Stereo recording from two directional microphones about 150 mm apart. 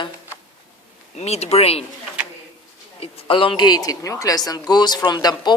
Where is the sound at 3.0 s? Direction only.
35° left (ahead or behind).